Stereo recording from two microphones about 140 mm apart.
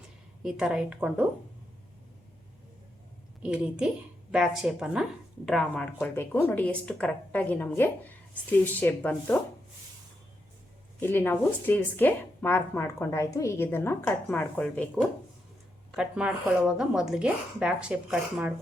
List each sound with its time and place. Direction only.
0.4 s a woman's voice: 5° right (ahead or behind)
3.4 s a woman's voice: 5° right (ahead or behind); by 9.4 s 10° left (ahead or behind)
11.0 s speech: 15° left (ahead or behind)
16.0 s speech: 5° right (ahead or behind)